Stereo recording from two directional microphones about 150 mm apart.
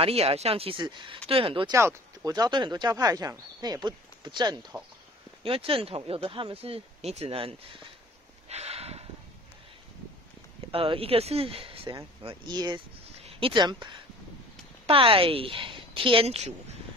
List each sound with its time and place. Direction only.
0.0 s speech: 40° right (ahead or behind)
1.7 s speech: 20° right (ahead or behind); by 7.9 s 35° right (ahead or behind)
8.5 s snort: 45° right (ahead or behind)
10.7 s speech: 40° right (ahead or behind)